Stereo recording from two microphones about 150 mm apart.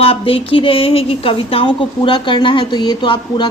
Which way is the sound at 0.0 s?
35° left (ahead or behind).